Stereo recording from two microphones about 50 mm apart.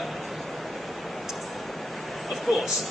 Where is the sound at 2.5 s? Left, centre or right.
Centre.